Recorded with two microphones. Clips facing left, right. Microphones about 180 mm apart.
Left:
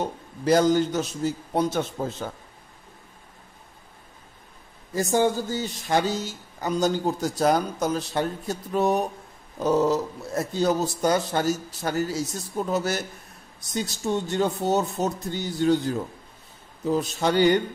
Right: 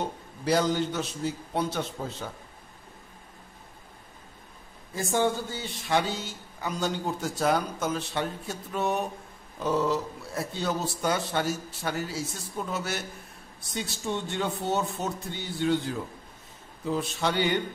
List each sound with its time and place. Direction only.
0.5 s a man's voice: 45° left (ahead or behind)
4.9 s speech: 40° left (ahead or behind)